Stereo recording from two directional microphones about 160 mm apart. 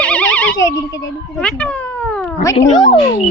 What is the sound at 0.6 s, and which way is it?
Speech, 20° left (ahead or behind).